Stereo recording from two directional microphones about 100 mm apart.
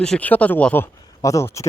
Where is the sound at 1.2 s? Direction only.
30° left (ahead or behind).